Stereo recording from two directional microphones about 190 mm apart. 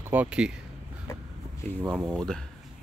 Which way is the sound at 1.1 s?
15° left (ahead or behind).